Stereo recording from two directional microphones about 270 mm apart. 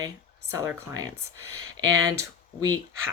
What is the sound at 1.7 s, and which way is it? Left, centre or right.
Speech, right.